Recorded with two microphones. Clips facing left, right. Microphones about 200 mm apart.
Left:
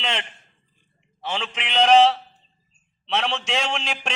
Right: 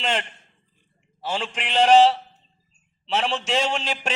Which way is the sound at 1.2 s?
10° right (ahead or behind).